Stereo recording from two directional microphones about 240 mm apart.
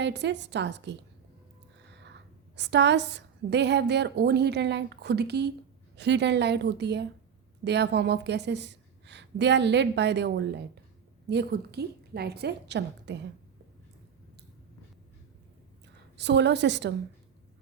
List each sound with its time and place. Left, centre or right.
0.0 s a woman's voice: right
2.6 s a woman's voice: right
16.1 s a woman's voice: right